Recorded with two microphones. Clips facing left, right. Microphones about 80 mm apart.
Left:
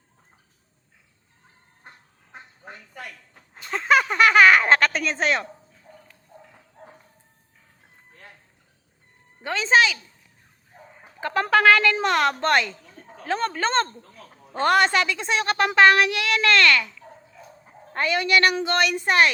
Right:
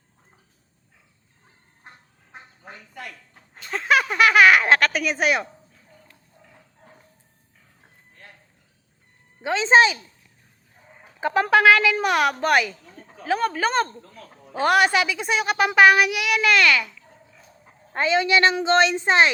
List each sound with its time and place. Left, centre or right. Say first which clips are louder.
3.7 s a sound: left 1 dB; centre
9.4 s speech: right 3 dB; right
10.7 s chicken: left 7 dB; left
11.2 s a woman's voice: right 2 dB; centre